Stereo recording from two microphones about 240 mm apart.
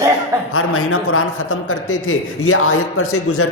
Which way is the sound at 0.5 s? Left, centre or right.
Left.